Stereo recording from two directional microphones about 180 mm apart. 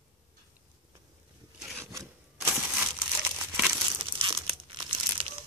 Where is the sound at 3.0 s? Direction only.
5° right (ahead or behind).